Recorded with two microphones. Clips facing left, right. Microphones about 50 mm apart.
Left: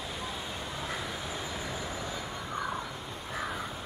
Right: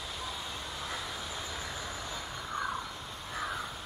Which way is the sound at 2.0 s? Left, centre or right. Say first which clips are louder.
Left 2 dB; centre.